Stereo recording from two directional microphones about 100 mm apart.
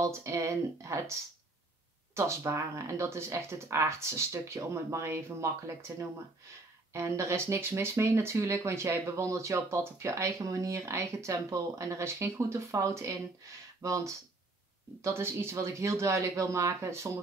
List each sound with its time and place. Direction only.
0.0 s speech: 30° right (ahead or behind)
2.1 s speech: 30° right (ahead or behind)
6.9 s speech: 30° right (ahead or behind)